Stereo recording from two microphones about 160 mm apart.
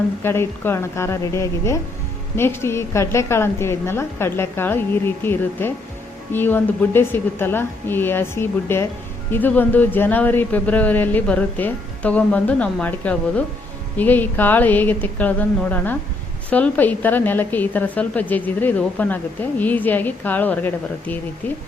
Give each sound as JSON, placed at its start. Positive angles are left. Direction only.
{"t": 0.2, "sound": "a woman's voice", "side_deg": 15}